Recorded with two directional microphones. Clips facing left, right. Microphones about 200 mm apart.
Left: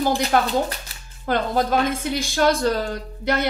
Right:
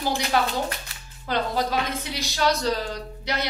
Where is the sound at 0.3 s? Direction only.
50° left (ahead or behind).